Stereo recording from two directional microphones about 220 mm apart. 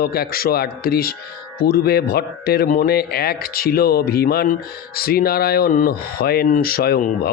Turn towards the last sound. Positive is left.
turn(degrees=40)  # may be behind; listen again after turning